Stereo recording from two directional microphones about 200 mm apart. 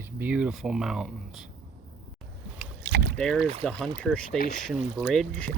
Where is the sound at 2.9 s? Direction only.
50° right (ahead or behind).